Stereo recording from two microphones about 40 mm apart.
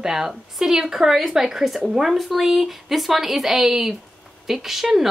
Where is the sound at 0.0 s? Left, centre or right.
Centre.